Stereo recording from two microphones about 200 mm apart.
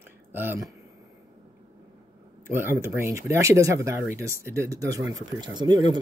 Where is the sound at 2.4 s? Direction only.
10° right (ahead or behind).